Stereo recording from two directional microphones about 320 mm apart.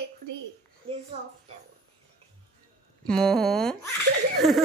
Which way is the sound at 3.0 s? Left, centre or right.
Centre.